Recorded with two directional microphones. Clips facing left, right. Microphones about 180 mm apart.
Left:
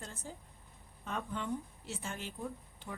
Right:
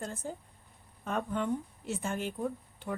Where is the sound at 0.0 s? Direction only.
55° right (ahead or behind).